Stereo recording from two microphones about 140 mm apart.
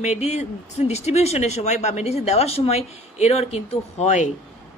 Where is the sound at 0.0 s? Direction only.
55° left (ahead or behind).